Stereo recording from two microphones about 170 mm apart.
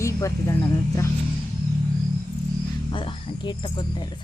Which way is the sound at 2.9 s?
30° left (ahead or behind).